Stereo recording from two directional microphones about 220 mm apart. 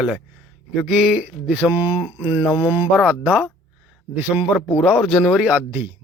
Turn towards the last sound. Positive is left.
turn(degrees=-10)  # may be behind; listen again after turning